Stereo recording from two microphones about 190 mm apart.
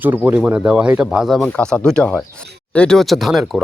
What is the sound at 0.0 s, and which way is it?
Speech, 10° right (ahead or behind).